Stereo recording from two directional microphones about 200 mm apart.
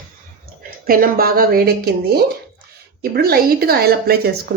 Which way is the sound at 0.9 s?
45° right (ahead or behind).